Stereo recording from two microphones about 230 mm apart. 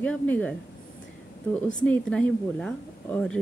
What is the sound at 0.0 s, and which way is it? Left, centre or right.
Speech, centre.